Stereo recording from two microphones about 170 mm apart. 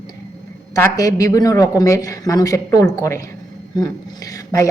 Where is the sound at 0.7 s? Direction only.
20° left (ahead or behind).